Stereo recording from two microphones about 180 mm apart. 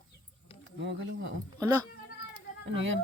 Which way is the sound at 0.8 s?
85° right.